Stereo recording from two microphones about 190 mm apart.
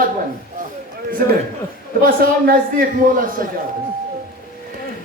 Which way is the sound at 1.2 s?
50° right (ahead or behind).